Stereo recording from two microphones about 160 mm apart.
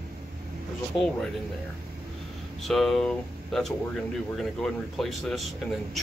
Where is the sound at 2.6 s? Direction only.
5° left (ahead or behind).